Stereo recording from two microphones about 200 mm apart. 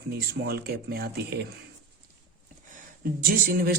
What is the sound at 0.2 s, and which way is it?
Speech, 50° right (ahead or behind).